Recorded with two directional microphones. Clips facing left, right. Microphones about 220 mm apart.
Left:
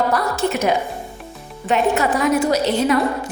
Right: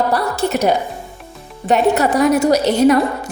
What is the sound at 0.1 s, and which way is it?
A woman's voice, 35° right (ahead or behind).